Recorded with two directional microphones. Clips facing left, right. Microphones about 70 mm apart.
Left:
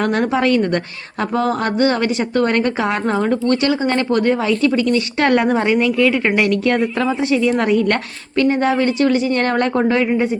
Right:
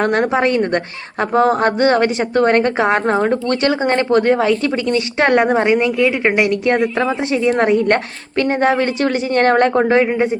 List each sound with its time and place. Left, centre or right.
0.0 s a woman's voice: right
0.3 s a woman's voice: right
4.9 s a woman's voice: right